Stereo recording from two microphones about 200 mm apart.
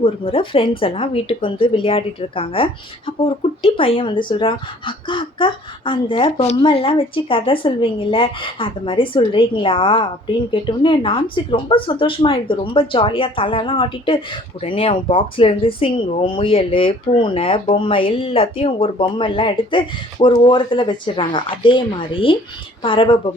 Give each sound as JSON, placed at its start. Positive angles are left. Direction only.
{"t": 0.0, "sound": "speech", "side_deg": 25}